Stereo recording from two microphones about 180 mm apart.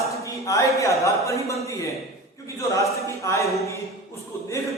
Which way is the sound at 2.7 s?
15° left (ahead or behind).